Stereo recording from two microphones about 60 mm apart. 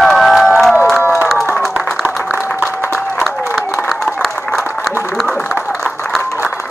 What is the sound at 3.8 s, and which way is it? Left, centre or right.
Applause, centre.